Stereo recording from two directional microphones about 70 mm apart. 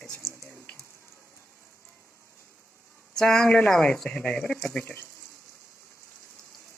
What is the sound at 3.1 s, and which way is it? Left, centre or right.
Speech, centre.